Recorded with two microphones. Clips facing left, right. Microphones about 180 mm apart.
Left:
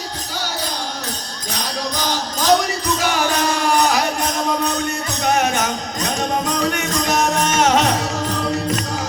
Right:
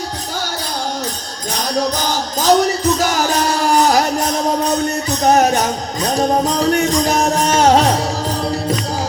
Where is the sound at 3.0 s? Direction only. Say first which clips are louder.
Right 3 dB; 40° right (ahead or behind).